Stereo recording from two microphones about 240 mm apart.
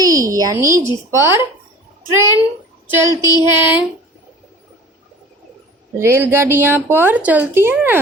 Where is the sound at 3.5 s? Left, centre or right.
Centre.